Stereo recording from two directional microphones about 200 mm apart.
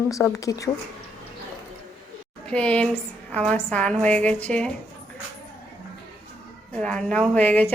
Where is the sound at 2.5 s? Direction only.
5° left (ahead or behind).